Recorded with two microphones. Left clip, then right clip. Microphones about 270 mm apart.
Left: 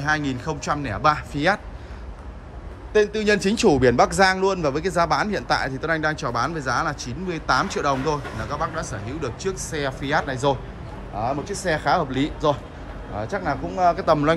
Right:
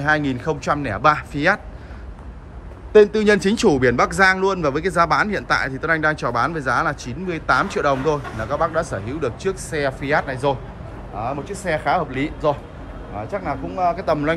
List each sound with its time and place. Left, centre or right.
0.0 s speech: centre
2.9 s speech: centre; by 14.3 s left